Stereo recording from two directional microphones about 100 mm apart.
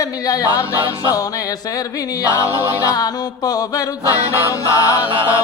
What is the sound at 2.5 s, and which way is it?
Mantra, 40° left (ahead or behind).